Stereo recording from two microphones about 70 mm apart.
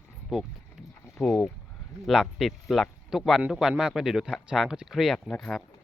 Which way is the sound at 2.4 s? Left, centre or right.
Centre.